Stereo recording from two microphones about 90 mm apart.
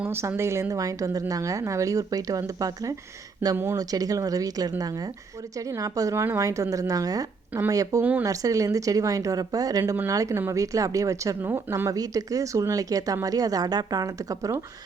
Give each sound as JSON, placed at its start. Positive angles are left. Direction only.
{"t": 0.1, "sound": "a woman's voice", "side_deg": -30}
{"t": 3.4, "sound": "speech", "side_deg": -25}
{"t": 3.8, "sound": "a woman's voice", "side_deg": -45}